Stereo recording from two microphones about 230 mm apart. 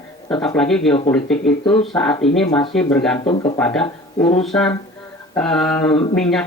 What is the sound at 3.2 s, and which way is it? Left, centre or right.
Speech, left.